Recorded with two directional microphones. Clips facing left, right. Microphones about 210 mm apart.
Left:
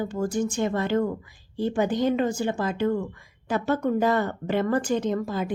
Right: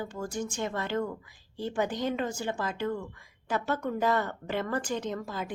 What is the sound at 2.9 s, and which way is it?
Speech, 40° left (ahead or behind).